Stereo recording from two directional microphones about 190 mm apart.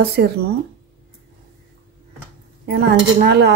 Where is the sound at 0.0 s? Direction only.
55° right (ahead or behind).